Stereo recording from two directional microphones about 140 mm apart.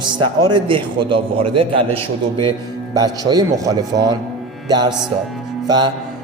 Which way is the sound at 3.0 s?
30° right (ahead or behind).